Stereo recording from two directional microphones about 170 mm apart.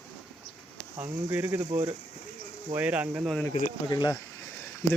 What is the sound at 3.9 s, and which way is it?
Speech, 25° left (ahead or behind).